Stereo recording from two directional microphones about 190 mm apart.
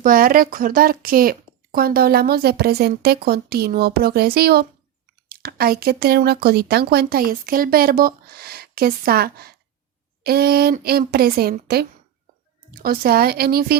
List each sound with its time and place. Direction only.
0.0 s speech: 50° right (ahead or behind)